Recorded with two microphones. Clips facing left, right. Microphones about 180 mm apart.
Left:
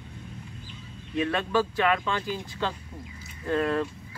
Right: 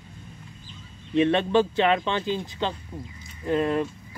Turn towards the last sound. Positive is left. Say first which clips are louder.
# right 2 dB
turn(degrees=-20)  # may be behind; listen again after turning